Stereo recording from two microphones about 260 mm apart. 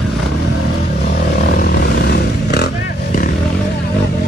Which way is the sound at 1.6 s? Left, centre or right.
Left.